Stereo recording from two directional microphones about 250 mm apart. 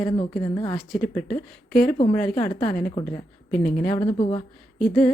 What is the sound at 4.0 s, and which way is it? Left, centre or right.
Speech, left.